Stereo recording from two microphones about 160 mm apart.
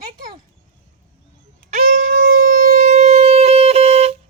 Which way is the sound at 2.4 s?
60° right (ahead or behind).